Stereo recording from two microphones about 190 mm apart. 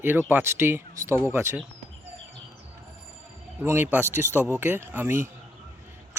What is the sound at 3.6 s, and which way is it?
Speech, 10° right (ahead or behind).